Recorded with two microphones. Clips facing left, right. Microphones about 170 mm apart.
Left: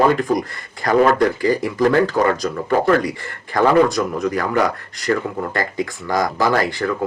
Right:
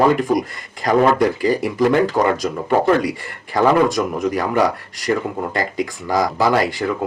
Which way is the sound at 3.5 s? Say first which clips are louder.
Left 1 dB; 15° right (ahead or behind).